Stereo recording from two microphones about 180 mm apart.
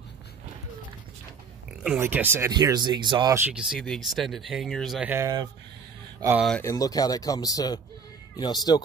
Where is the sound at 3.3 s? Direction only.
10° right (ahead or behind).